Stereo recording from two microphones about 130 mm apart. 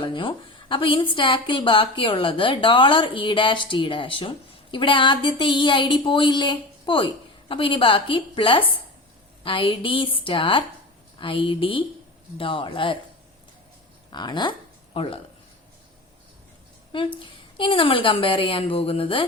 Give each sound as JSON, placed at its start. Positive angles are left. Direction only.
{"t": 0.0, "sound": "a woman's voice", "side_deg": 40}
{"t": 14.1, "sound": "a woman's voice", "side_deg": 35}
{"t": 14.9, "sound": "speech", "side_deg": 45}
{"t": 16.9, "sound": "a woman's voice", "side_deg": 40}